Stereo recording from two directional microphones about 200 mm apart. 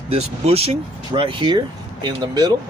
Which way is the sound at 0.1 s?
30° right (ahead or behind).